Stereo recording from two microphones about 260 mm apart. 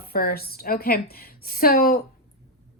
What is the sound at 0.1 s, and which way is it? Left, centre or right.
A woman's voice, left.